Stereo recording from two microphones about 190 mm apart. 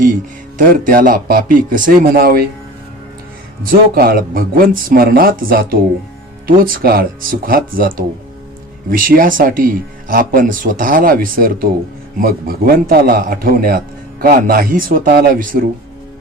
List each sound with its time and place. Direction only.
0.6 s a man's voice: 50° right (ahead or behind)
3.6 s a man's voice: 50° right (ahead or behind)
6.7 s a man's voice: 50° right (ahead or behind)